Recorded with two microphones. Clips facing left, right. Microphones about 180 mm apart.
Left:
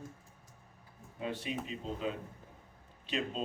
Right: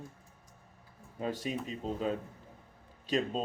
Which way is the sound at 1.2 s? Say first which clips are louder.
Right 3 dB; 40° right (ahead or behind).